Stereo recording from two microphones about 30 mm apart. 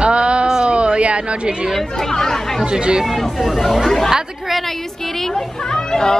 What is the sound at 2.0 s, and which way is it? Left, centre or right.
Speech, centre.